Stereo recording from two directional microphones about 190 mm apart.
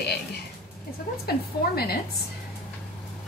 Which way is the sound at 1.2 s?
55° left (ahead or behind).